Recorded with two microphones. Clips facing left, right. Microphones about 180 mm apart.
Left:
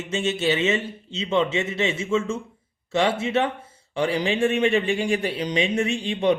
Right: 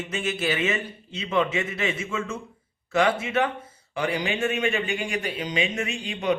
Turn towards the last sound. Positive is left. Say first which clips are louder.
# left 5 dB
turn(degrees=30)  # may be behind; listen again after turning